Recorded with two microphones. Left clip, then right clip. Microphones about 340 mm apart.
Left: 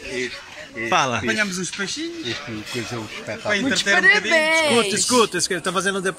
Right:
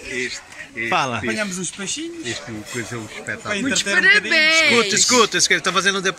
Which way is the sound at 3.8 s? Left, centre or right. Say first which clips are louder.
Right 2 dB; centre.